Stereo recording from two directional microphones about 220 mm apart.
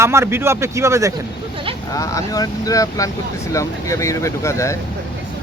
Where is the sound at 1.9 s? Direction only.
15° left (ahead or behind).